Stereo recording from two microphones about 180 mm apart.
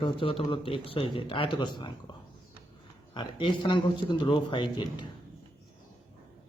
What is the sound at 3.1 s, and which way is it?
Speech, 25° left (ahead or behind).